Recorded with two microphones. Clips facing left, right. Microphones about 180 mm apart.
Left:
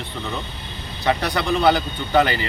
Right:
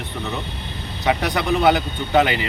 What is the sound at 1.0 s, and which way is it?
Speech, 15° right (ahead or behind).